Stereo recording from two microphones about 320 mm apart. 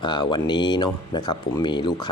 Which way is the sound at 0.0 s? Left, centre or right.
Centre.